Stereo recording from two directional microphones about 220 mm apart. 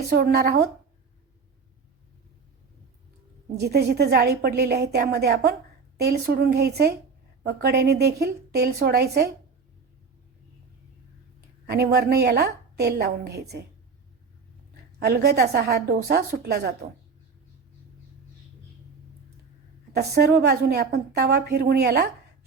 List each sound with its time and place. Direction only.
0.1 s a woman's voice: 45° right (ahead or behind)
3.6 s a woman's voice: 45° right (ahead or behind)
11.3 s a woman's voice: 45° right (ahead or behind)
14.9 s a woman's voice: 45° right (ahead or behind)
19.9 s a woman's voice: 45° right (ahead or behind)